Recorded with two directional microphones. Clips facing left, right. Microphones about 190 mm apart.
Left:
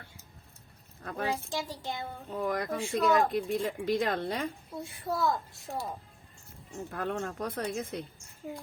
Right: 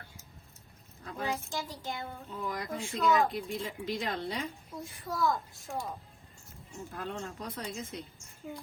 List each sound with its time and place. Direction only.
1.3 s a child's voice: 25° left (ahead or behind)
2.4 s speech: 55° left (ahead or behind)
4.7 s a child's voice: 25° left (ahead or behind)
6.9 s speech: 55° left (ahead or behind)